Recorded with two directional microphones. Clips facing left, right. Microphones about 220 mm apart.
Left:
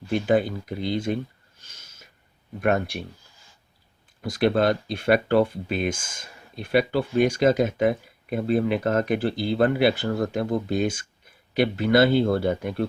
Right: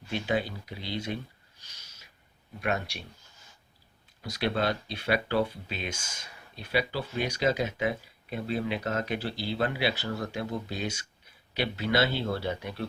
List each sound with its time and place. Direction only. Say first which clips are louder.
0.1 s speech: left 8 dB; 50° left (ahead or behind)
1.6 s a sound: left 6 dB; 50° left (ahead or behind)
2.6 s speech: left 8 dB; 50° left (ahead or behind)
4.2 s speech: left 8 dB; 50° left (ahead or behind)